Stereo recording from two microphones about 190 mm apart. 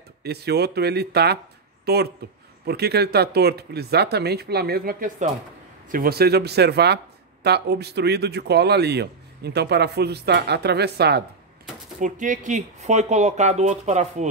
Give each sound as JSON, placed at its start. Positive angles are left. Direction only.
{"t": 0.2, "sound": "a man's voice", "side_deg": -60}
{"t": 12.0, "sound": "speech", "side_deg": -40}